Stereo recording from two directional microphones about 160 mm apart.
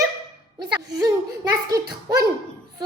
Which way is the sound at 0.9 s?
25° right (ahead or behind).